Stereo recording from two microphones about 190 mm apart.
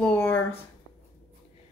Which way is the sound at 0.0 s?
10° left (ahead or behind).